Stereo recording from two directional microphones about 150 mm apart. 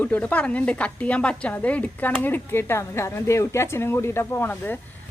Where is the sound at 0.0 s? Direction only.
10° left (ahead or behind).